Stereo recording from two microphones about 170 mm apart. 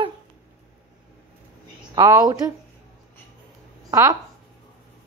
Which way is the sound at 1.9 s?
20° right (ahead or behind).